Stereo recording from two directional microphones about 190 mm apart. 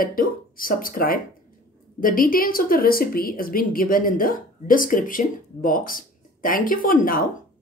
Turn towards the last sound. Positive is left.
turn(degrees=45)  # may be behind; listen again after turning